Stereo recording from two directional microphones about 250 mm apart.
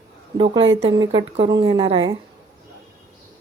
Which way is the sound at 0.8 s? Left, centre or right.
Right.